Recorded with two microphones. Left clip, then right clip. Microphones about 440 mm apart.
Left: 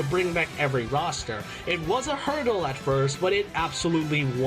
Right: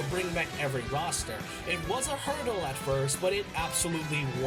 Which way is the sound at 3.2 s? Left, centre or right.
Right.